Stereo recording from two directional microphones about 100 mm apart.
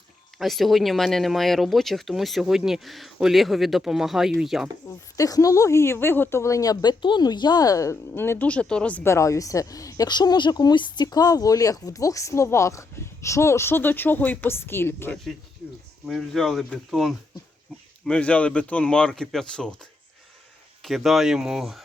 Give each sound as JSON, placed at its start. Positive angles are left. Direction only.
{"t": 0.3, "sound": "speech", "side_deg": 0}
{"t": 4.9, "sound": "a woman's voice", "side_deg": 35}
{"t": 7.0, "sound": "a woman's voice", "side_deg": 50}
{"t": 9.0, "sound": "a woman's voice", "side_deg": 30}
{"t": 16.0, "sound": "speech", "side_deg": 5}
{"t": 18.0, "sound": "speech", "side_deg": 10}
{"t": 20.8, "sound": "speech", "side_deg": 0}